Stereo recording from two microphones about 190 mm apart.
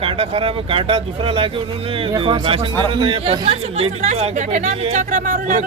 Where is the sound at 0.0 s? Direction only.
30° right (ahead or behind).